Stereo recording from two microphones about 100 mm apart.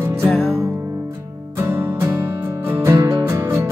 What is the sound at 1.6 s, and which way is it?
Music, 25° right (ahead or behind).